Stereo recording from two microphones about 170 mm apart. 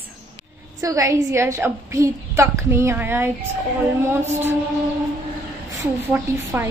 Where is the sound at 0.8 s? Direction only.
20° right (ahead or behind).